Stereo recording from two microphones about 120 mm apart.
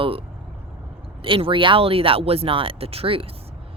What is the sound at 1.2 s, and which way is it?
Speech, 45° right (ahead or behind).